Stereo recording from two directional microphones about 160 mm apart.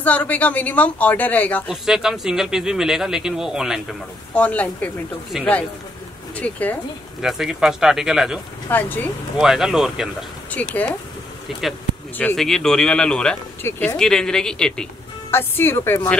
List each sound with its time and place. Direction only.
0.0 s a woman's voice: 10° left (ahead or behind)
1.7 s speech: 5° right (ahead or behind)
4.4 s a woman's voice: 10° left (ahead or behind)
7.2 s speech: centre (ahead or behind)
8.6 s a woman's voice: 10° left (ahead or behind)
9.4 s speech: 5° right (ahead or behind)
10.5 s a woman's voice: 10° left (ahead or behind)
12.2 s a woman's voice: 5° left (ahead or behind)